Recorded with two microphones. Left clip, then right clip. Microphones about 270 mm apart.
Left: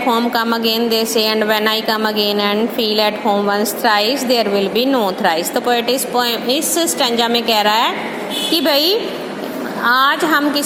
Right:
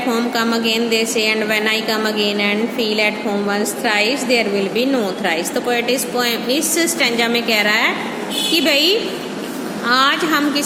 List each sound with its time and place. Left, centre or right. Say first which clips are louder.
0.1 s a woman's voice: left 3 dB; centre